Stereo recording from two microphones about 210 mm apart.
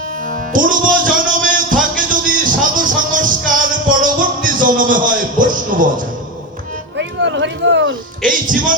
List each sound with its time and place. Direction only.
0.3 s music: 40° right (ahead or behind)
6.9 s a sound: 55° right (ahead or behind)
8.2 s a man's voice: 40° right (ahead or behind)